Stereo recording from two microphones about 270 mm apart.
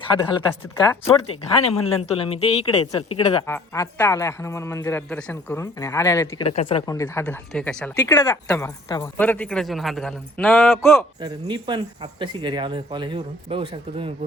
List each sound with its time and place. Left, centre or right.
0.1 s speech: centre
3.4 s speech: centre
6.5 s speech: left
11.2 s a man's voice: centre